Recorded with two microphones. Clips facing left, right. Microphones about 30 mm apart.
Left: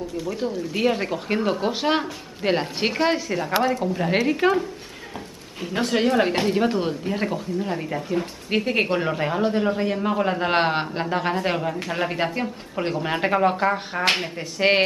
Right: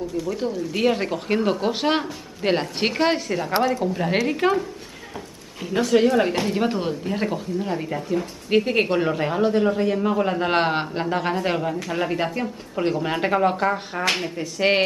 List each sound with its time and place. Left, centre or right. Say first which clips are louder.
0.2 s speech: even; centre
5.8 s speech: right 2 dB; left
6.4 s speech: left 1 dB; centre
12.7 s speech: right 2 dB; centre
14.0 s speech: left 1 dB; centre